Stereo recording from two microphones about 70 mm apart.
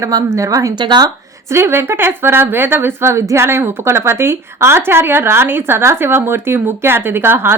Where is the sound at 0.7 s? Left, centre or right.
Right.